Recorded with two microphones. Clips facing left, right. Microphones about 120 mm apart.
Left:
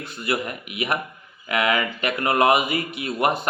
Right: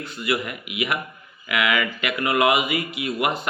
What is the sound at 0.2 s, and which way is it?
Speech, 35° left (ahead or behind).